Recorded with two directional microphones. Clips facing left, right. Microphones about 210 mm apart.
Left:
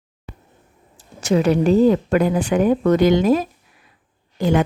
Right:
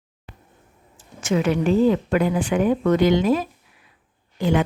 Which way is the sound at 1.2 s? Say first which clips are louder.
Left 4 dB; 35° left (ahead or behind).